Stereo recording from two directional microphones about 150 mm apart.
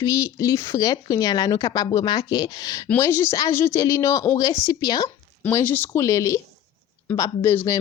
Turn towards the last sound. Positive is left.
turn(degrees=15)  # may be behind; listen again after turning